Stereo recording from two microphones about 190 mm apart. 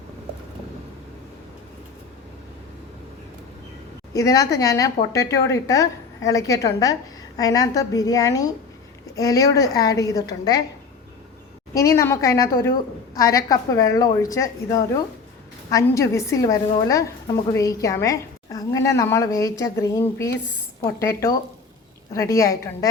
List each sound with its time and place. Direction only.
4.1 s a woman's voice: 15° left (ahead or behind)
11.7 s a woman's voice: 15° left (ahead or behind)